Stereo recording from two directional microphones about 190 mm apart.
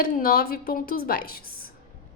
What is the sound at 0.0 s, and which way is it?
A woman's voice, 50° left (ahead or behind).